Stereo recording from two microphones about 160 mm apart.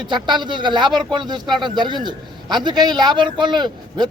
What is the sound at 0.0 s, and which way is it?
A man's voice, 30° right (ahead or behind).